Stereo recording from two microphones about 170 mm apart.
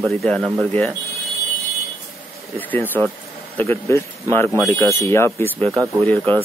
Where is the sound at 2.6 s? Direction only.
10° left (ahead or behind).